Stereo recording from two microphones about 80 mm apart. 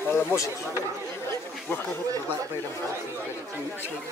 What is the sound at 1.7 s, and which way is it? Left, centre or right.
Speech, left.